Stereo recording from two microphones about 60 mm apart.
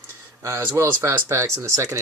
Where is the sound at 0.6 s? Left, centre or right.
Right.